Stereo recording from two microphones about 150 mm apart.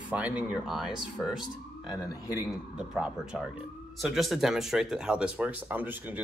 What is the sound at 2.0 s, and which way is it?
Speech, 20° left (ahead or behind).